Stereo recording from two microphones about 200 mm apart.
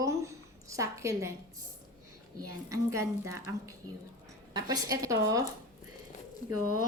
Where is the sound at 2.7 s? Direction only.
15° right (ahead or behind).